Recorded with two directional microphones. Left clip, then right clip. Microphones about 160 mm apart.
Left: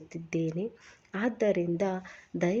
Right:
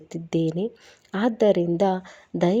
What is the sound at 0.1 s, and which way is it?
A woman's voice, 40° right (ahead or behind).